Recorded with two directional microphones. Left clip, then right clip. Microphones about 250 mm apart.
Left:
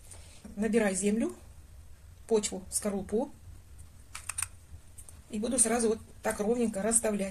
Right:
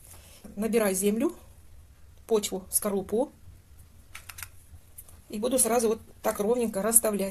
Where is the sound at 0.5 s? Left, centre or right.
Right.